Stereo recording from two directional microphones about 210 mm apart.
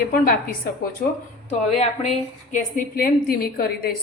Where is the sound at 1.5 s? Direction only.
30° left (ahead or behind).